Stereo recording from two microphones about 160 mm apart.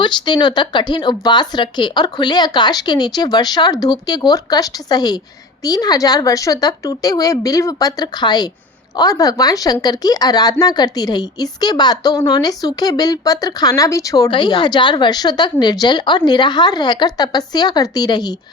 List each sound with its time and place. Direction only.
0.0 s speech: 30° left (ahead or behind)